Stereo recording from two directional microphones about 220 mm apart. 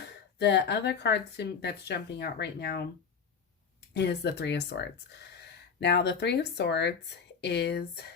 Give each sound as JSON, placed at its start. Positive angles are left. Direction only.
{"t": 0.3, "sound": "speech", "side_deg": 50}